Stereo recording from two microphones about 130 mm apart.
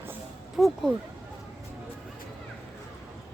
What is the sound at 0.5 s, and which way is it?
Speech, centre (ahead or behind).